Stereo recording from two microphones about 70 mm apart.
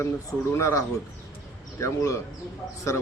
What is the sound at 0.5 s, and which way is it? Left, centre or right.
A man's voice, left.